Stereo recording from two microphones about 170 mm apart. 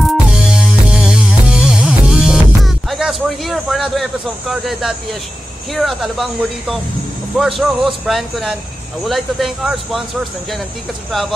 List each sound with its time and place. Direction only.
0.0 s music: centre (ahead or behind)
5.7 s speech: centre (ahead or behind)
7.3 s speech: centre (ahead or behind)
11.1 s speech: centre (ahead or behind)